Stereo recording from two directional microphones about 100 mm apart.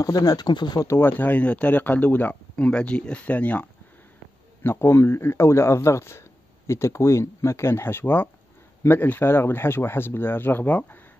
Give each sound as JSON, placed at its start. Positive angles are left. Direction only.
{"t": 0.0, "sound": "speech", "side_deg": 35}
{"t": 0.7, "sound": "speech", "side_deg": 25}
{"t": 4.6, "sound": "speech", "side_deg": 20}